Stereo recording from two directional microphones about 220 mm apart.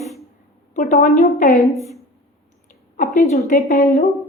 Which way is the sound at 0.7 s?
35° left (ahead or behind).